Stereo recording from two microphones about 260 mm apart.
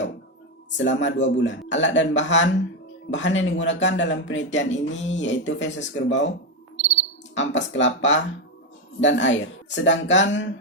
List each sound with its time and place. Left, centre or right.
0.8 s speech: left
7.3 s speech: left